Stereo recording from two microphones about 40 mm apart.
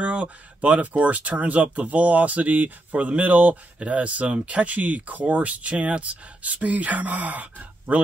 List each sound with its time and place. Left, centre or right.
0.0 s speech: right